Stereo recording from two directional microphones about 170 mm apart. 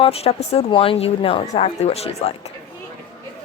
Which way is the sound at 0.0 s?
35° left (ahead or behind).